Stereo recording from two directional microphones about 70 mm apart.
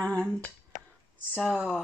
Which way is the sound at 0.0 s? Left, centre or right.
Centre.